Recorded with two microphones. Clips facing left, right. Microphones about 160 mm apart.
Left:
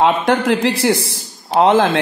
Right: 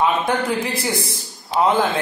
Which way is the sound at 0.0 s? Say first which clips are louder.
Left 5 dB; 90° left.